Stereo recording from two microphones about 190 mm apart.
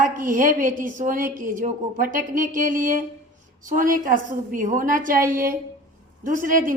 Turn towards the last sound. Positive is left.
turn(degrees=-45)  # may be behind; listen again after turning